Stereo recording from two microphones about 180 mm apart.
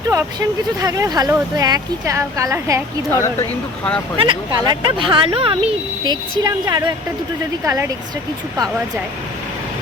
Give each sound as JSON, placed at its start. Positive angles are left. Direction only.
{"t": 0.1, "sound": "speech", "side_deg": -20}
{"t": 3.1, "sound": "speech", "side_deg": 15}
{"t": 4.2, "sound": "speech", "side_deg": -25}